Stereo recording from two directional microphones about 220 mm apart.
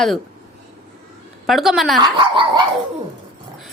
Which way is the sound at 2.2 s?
20° right (ahead or behind).